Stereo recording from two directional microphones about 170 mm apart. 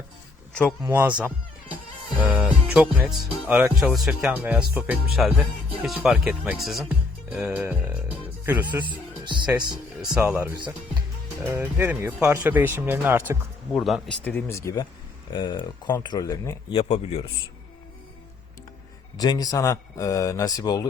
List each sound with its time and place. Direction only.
0.9 s speech: 10° right (ahead or behind)
2.2 s speech: 10° right (ahead or behind)
9.5 s speech: 25° right (ahead or behind)
10.2 s speech: 10° right (ahead or behind)
13.7 s speech: centre (ahead or behind)
14.3 s speech: 15° left (ahead or behind)
16.7 s speech: 35° left (ahead or behind)
19.1 s speech: 25° left (ahead or behind)